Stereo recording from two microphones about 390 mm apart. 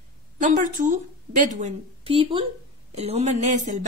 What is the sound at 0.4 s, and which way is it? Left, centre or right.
A woman's voice, centre.